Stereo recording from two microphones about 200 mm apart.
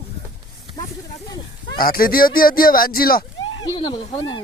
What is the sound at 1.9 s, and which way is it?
Speech, 45° left (ahead or behind).